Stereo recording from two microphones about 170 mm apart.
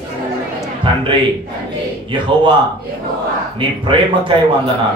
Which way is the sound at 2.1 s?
30° right (ahead or behind).